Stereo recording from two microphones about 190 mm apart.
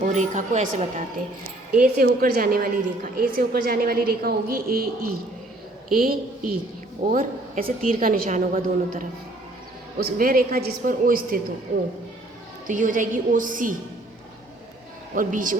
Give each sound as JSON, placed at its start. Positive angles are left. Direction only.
{"t": 0.1, "sound": "a woman's voice", "side_deg": -40}
{"t": 5.9, "sound": "a woman's voice", "side_deg": -50}
{"t": 12.6, "sound": "a woman's voice", "side_deg": -40}
{"t": 15.1, "sound": "a woman's voice", "side_deg": -45}